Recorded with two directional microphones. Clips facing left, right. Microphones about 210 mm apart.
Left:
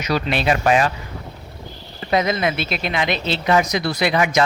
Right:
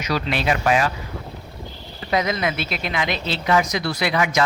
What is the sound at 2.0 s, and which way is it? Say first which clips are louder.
Speech: left 3 dB; 30° left (ahead or behind).